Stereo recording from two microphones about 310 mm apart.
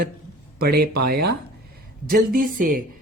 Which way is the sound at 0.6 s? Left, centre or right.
Right.